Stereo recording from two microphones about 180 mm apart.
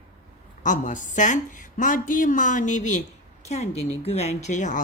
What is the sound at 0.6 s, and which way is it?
A woman's voice, 45° left (ahead or behind).